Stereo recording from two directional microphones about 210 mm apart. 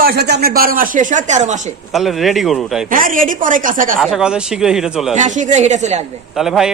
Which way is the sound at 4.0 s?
Centre (ahead or behind).